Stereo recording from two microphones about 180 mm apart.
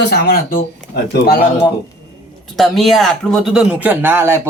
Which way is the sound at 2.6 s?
Centre (ahead or behind).